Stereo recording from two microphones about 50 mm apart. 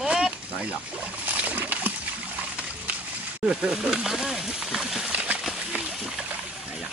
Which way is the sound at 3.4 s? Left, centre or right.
Centre.